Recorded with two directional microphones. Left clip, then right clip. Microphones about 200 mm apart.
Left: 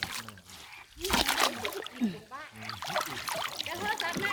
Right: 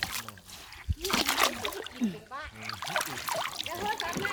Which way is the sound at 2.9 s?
20° right (ahead or behind).